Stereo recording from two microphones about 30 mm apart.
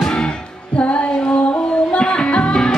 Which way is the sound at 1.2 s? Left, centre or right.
Left.